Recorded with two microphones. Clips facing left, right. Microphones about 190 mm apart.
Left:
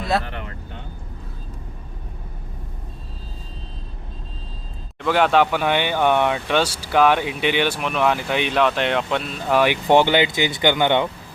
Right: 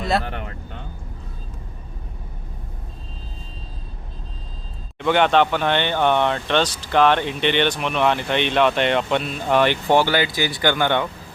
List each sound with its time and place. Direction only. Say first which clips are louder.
4.9 s speech: even; centre (ahead or behind)
9.8 s speech: left 2 dB; 20° left (ahead or behind)